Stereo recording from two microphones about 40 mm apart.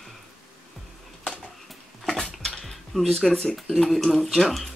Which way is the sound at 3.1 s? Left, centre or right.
Centre.